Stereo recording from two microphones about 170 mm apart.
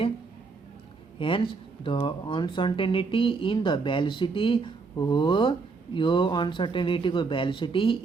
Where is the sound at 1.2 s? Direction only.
30° left (ahead or behind).